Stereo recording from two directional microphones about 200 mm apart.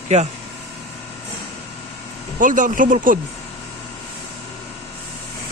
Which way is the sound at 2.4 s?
40° right (ahead or behind).